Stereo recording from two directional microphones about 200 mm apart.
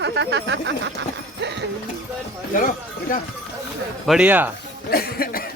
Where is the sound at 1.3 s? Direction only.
60° right (ahead or behind).